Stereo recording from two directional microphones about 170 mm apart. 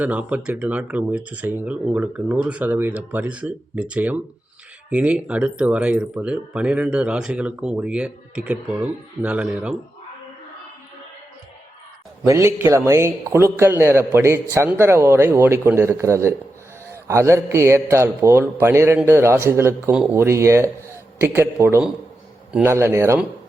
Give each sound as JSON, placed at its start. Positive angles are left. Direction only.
{"t": 0.0, "sound": "a man's voice", "side_deg": -10}
{"t": 12.3, "sound": "a man's voice", "side_deg": -15}